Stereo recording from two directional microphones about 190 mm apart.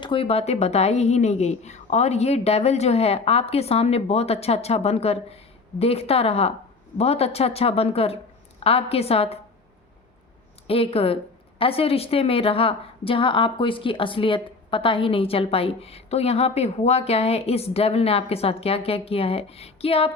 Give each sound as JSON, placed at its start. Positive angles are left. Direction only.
{"t": 0.0, "sound": "a woman's voice", "side_deg": 30}
{"t": 10.7, "sound": "a woman's voice", "side_deg": 30}